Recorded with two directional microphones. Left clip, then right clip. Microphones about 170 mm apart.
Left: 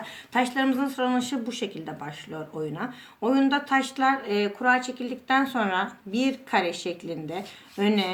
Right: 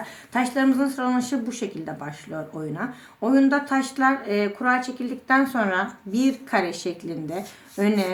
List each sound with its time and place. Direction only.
0.3 s speech: 45° right (ahead or behind)